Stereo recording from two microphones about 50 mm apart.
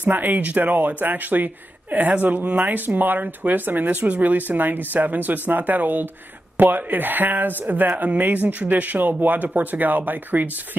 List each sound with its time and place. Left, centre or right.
0.0 s speech: right